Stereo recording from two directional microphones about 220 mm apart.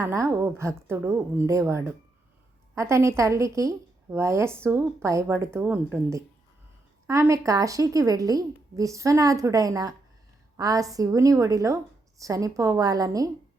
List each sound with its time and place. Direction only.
0.0 s a woman's voice: 10° right (ahead or behind)